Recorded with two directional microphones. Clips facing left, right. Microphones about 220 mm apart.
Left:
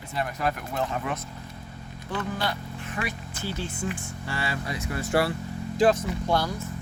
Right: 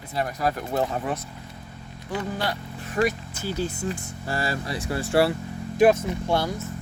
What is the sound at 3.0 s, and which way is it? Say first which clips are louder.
Speech: right 10 dB; 40° right (ahead or behind).